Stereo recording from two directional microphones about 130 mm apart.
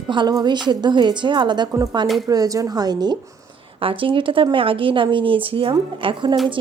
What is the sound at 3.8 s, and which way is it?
A woman's voice, 45° right (ahead or behind).